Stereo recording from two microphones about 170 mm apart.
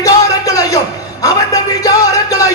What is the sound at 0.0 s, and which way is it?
Music, 20° left (ahead or behind).